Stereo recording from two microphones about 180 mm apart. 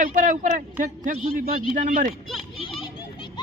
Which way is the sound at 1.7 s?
45° right (ahead or behind).